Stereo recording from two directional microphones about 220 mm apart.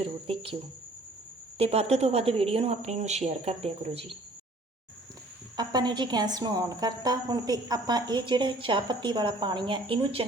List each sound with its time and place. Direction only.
0.0 s a woman's voice: 25° right (ahead or behind)
1.5 s a woman's voice: 25° right (ahead or behind)
5.5 s a woman's voice: 20° right (ahead or behind)